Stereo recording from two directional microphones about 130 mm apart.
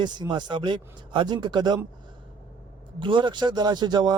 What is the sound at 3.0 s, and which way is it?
Speech, 40° right (ahead or behind).